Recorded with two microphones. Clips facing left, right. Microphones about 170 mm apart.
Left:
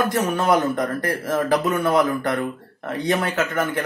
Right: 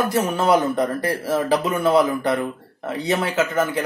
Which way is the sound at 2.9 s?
10° right (ahead or behind).